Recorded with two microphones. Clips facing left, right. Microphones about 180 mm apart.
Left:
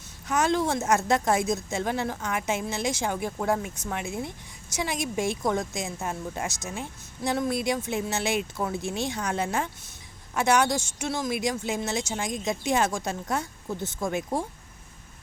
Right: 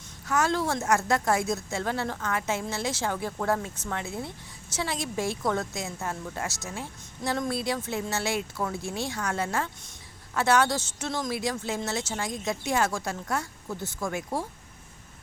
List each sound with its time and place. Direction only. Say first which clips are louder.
0.3 s a woman's voice: left 2 dB; 20° left (ahead or behind)
7.3 s a woman's voice: left 2 dB; 5° left (ahead or behind)